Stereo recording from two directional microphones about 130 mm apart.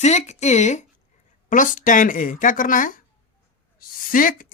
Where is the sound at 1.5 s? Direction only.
90° left.